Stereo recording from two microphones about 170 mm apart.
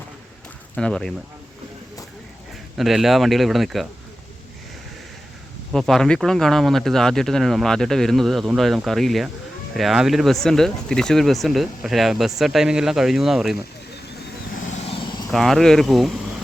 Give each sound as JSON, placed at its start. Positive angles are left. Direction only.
{"t": 0.8, "sound": "speech", "side_deg": 5}
{"t": 2.7, "sound": "speech", "side_deg": 0}
{"t": 5.7, "sound": "speech", "side_deg": 0}
{"t": 14.8, "sound": "a sound", "side_deg": 30}
{"t": 15.3, "sound": "speech", "side_deg": 0}